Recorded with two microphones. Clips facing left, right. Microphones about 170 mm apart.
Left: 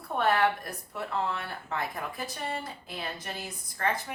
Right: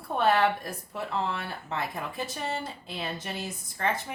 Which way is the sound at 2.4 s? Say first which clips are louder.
Right 2 dB; 25° right (ahead or behind).